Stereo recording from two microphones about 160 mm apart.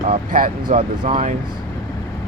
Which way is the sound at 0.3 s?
65° right (ahead or behind).